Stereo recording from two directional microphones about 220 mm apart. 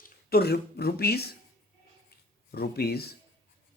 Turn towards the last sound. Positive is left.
turn(degrees=45)  # may be behind; listen again after turning